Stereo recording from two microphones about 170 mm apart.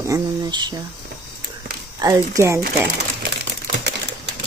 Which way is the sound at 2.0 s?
20° right (ahead or behind).